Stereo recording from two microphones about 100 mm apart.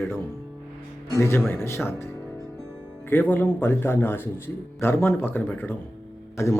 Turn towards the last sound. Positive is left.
turn(degrees=30)  # may be behind; listen again after turning